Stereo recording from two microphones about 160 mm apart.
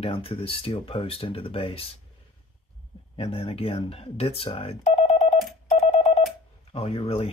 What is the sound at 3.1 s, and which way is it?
Speech, 35° left (ahead or behind).